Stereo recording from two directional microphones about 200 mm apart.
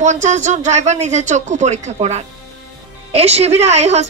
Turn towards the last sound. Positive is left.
turn(degrees=-35)  # may be behind; listen again after turning